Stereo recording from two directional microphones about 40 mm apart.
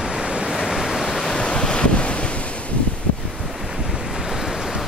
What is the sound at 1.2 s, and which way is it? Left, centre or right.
Waves, centre.